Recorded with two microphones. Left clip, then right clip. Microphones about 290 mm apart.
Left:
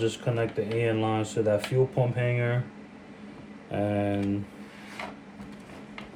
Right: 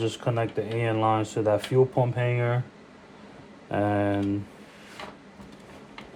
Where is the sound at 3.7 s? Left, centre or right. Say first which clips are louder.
Right 3 dB; right.